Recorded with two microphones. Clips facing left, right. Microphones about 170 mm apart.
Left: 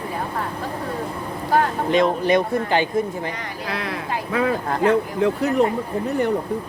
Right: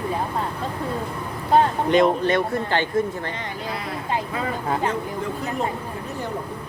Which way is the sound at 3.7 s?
80° left.